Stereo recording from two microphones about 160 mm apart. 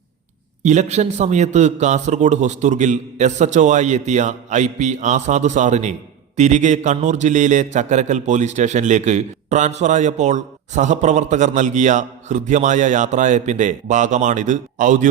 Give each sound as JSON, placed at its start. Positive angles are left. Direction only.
{"t": 0.6, "sound": "a man's voice", "side_deg": -45}